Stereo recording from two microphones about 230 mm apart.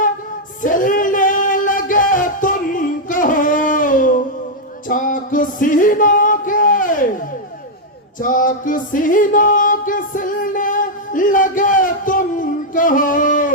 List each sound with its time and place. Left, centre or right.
0.6 s music: left
8.2 s music: left